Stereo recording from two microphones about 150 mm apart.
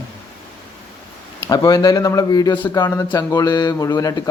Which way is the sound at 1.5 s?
25° left (ahead or behind).